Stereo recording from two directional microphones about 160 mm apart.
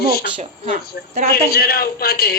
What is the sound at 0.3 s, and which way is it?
Speech, 40° right (ahead or behind).